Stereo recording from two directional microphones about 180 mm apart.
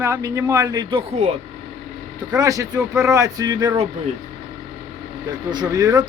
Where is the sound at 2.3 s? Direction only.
20° right (ahead or behind).